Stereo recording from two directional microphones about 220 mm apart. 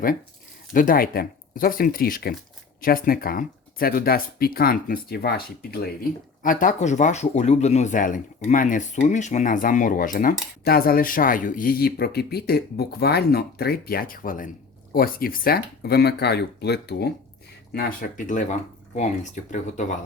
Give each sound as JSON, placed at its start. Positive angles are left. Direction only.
{"t": 0.7, "sound": "speech", "side_deg": 40}
{"t": 19.5, "sound": "speech", "side_deg": 35}